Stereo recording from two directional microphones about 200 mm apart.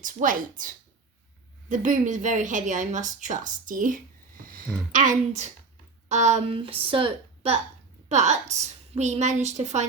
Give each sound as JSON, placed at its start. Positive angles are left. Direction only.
{"t": 0.0, "sound": "speech", "side_deg": -40}
{"t": 1.7, "sound": "speech", "side_deg": -40}
{"t": 4.4, "sound": "a sound", "side_deg": -45}
{"t": 4.9, "sound": "a woman's voice", "side_deg": -40}